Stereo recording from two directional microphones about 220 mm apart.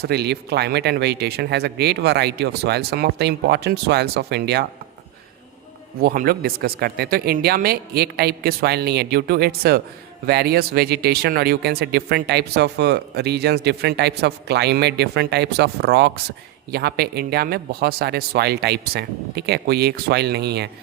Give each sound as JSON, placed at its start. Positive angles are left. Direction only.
{"t": 0.0, "sound": "speech", "side_deg": -50}
{"t": 6.0, "sound": "speech", "side_deg": -40}